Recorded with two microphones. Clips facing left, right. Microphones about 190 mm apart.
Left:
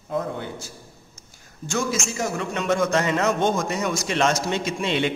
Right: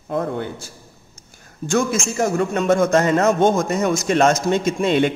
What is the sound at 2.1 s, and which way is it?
A man's voice, 50° right (ahead or behind).